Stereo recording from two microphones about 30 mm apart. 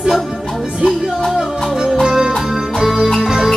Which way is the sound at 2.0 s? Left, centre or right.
Centre.